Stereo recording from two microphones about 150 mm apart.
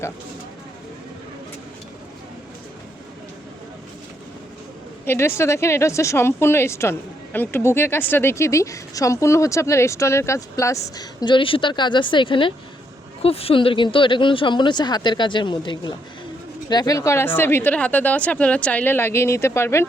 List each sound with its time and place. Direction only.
5.0 s a woman's voice: 15° left (ahead or behind)